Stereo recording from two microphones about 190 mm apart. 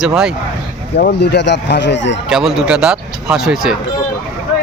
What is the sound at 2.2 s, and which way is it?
Speech, centre (ahead or behind).